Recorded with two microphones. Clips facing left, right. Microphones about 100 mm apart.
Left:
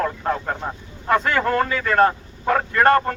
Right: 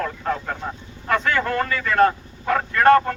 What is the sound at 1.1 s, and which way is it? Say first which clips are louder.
Speech: left 2 dB; 10° left (ahead or behind).